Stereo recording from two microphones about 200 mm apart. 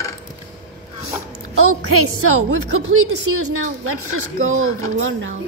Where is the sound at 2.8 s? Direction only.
90° right.